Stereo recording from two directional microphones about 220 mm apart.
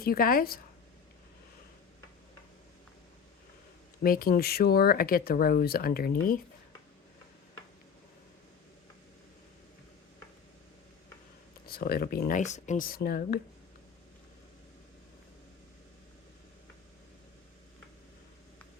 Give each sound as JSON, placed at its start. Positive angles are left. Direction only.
{"t": 0.0, "sound": "speech", "side_deg": 40}
{"t": 4.0, "sound": "speech", "side_deg": 40}
{"t": 11.6, "sound": "speech", "side_deg": 45}